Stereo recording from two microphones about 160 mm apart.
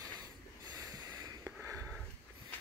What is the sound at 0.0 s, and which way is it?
Snort, 25° right (ahead or behind).